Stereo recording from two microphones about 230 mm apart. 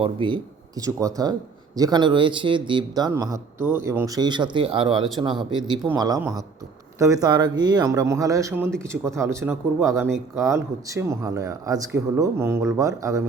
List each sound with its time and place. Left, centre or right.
0.0 s speech: right